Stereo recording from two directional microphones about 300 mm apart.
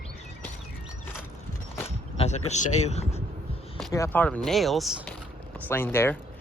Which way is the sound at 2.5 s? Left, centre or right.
Left.